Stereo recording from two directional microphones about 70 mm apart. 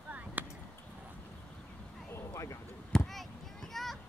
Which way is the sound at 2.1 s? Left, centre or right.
Left.